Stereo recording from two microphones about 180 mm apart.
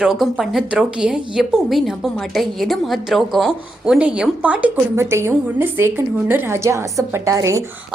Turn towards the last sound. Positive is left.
turn(degrees=-15)  # may be behind; listen again after turning